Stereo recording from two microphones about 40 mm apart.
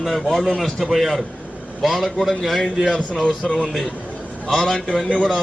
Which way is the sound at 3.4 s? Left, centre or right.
Centre.